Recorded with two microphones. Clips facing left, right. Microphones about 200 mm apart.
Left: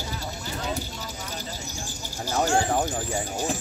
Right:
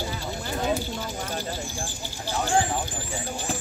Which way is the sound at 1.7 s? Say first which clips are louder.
Right 2 dB; 40° left (ahead or behind).